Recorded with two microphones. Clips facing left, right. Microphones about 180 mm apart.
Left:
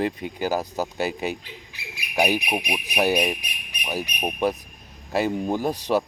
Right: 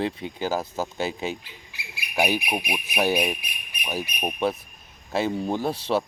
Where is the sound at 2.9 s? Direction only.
15° left (ahead or behind).